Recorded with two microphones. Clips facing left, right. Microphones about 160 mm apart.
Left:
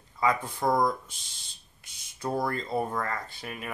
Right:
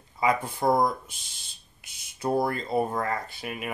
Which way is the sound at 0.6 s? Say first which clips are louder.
Right 3 dB; 30° right (ahead or behind).